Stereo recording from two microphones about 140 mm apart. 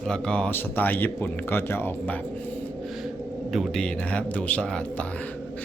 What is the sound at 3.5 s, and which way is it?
Speech, centre (ahead or behind).